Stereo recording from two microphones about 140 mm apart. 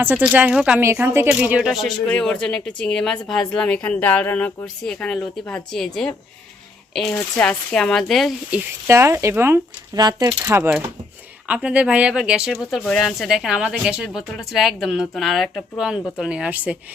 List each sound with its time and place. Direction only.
0.0 s speech: 10° right (ahead or behind)
2.0 s speech: 10° left (ahead or behind)
7.3 s speech: 5° left (ahead or behind)
8.9 s speech: 20° right (ahead or behind)
9.9 s speech: 30° right (ahead or behind)
10.2 s speech: 15° right (ahead or behind)